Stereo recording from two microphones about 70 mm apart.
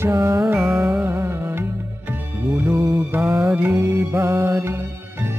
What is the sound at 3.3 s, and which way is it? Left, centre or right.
Music, centre.